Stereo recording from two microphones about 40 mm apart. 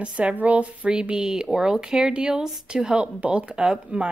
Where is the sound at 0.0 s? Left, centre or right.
Right.